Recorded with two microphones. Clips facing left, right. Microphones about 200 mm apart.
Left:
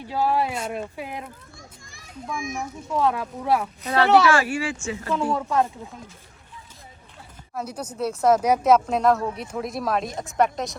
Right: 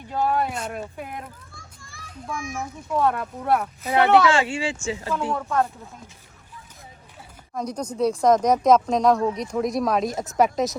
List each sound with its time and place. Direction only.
0.1 s speech: 5° left (ahead or behind)
2.6 s speech: centre (ahead or behind)
3.9 s speech: 20° right (ahead or behind)
5.3 s speech: 5° left (ahead or behind)
7.5 s speech: 5° left (ahead or behind)